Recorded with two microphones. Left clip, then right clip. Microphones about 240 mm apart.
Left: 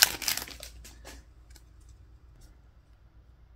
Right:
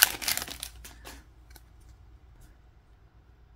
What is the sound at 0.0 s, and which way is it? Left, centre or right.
Crumpling, centre.